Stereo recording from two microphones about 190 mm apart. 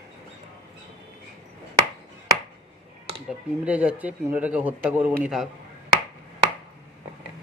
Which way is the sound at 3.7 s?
10° right (ahead or behind).